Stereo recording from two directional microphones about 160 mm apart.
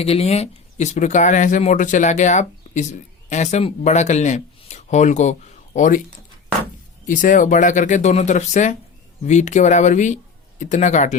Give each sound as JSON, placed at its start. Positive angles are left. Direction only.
{"t": 0.0, "sound": "speech", "side_deg": 40}
{"t": 7.1, "sound": "speech", "side_deg": 55}